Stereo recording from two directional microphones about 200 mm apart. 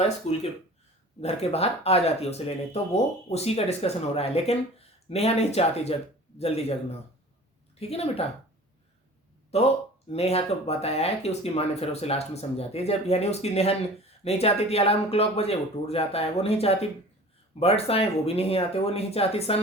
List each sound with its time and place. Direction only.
0.3 s speech: 30° left (ahead or behind)
9.5 s speech: 30° left (ahead or behind)